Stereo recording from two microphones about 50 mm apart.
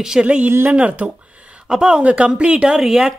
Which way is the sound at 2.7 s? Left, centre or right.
Centre.